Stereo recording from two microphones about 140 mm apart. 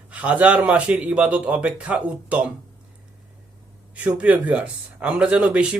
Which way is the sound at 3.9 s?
10° right (ahead or behind).